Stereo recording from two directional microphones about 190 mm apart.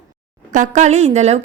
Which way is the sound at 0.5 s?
40° right (ahead or behind).